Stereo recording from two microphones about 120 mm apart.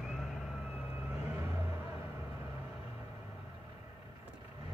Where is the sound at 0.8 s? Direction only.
20° right (ahead or behind).